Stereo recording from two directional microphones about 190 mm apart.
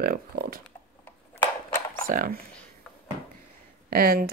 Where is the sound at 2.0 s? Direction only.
45° right (ahead or behind).